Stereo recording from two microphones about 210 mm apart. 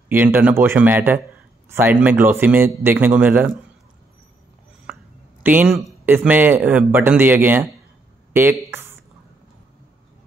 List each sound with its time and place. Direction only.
0.1 s speech: 10° right (ahead or behind)
5.4 s speech: 10° right (ahead or behind)